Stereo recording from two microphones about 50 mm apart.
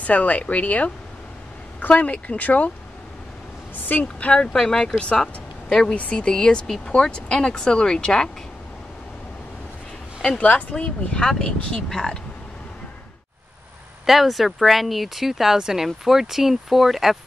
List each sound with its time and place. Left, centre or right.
0.0 s speech: left
3.9 s speech: left
4.3 s a woman's voice: centre
10.2 s speech: left
14.0 s speech: centre